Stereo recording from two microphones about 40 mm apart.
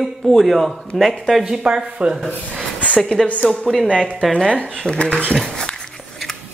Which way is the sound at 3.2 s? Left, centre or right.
Centre.